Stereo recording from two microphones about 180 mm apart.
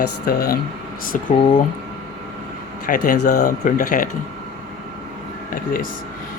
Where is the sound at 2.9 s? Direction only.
45° left (ahead or behind).